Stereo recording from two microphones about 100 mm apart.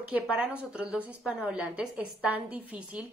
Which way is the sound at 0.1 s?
15° right (ahead or behind).